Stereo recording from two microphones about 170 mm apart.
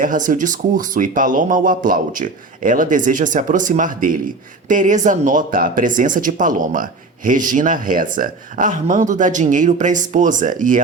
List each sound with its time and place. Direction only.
0.0 s speech: 50° right (ahead or behind)